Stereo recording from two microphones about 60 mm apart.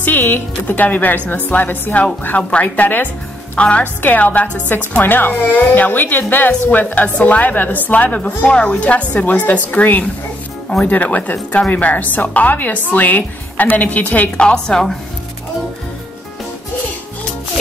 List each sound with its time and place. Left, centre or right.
0.0 s a woman's voice: left
14.4 s a woman's voice: centre